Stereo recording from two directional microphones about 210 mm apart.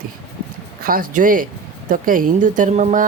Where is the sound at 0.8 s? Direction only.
40° right (ahead or behind).